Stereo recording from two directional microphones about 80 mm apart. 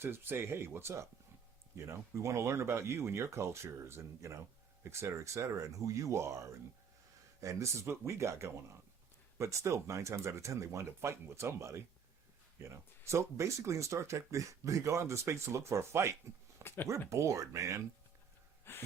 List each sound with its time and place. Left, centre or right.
0.0 s speech: right
16.6 s speech: left
17.1 s speech: right